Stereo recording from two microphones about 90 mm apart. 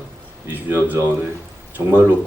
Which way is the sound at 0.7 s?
25° right (ahead or behind).